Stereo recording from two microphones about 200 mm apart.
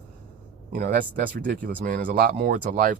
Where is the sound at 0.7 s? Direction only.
45° right (ahead or behind).